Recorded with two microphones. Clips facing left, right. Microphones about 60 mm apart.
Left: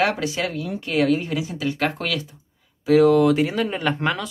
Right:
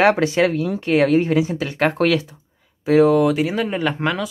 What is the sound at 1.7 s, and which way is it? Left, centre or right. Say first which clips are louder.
Speech: right 9 dB; right.